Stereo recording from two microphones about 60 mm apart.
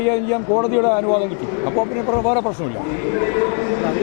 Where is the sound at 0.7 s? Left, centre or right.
Left.